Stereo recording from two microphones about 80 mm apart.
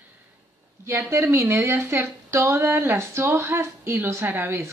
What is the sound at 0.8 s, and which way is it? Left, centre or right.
A woman's voice, right.